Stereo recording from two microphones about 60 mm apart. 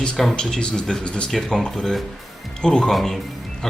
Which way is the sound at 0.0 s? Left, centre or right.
Centre.